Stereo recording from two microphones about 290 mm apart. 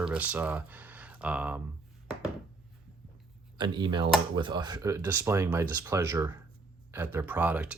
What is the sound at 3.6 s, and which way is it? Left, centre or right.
Speech, centre.